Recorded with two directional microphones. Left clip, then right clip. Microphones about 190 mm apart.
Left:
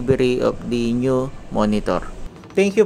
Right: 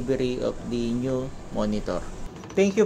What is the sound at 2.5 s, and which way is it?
Speech, 30° left (ahead or behind).